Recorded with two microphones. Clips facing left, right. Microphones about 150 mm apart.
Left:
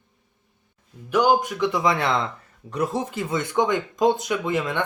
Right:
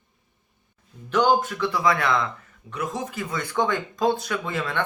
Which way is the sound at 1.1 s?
10° left (ahead or behind).